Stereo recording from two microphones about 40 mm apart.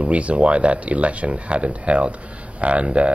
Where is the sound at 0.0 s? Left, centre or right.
Right.